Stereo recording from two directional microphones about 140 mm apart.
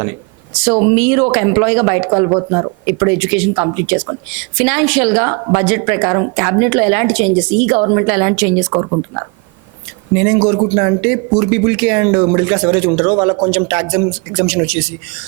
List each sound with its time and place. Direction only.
0.6 s speech: 15° right (ahead or behind)